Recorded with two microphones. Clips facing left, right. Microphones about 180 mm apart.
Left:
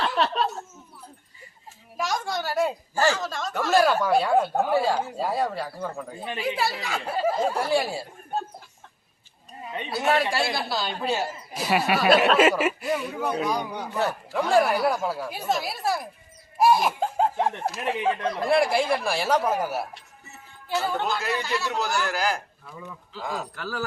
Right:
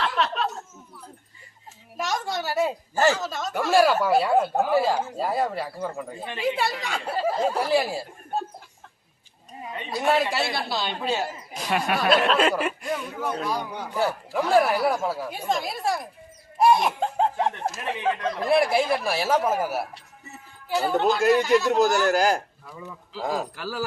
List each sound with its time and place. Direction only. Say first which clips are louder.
0.0 s a sound: left 1 dB; 35° left (ahead or behind)
2.0 s a woman's voice: even; centre (ahead or behind)
2.9 s speech: right 3 dB; 20° right (ahead or behind)
3.2 s speech: right 1 dB; centre (ahead or behind)
9.9 s speech: right 1 dB; centre (ahead or behind)
13.9 s speech: right 1 dB; 5° right (ahead or behind)
16.6 s laughter: right 1 dB; 5° left (ahead or behind)
18.3 s speech: right 1 dB; centre (ahead or behind)
20.8 s speech: right 10 dB; 40° right (ahead or behind)
23.6 s speech: right 1 dB; 10° right (ahead or behind)